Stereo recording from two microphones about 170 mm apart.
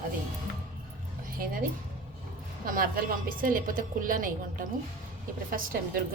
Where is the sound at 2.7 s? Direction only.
55° right (ahead or behind).